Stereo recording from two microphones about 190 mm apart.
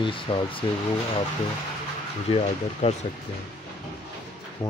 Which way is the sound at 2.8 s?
35° left (ahead or behind).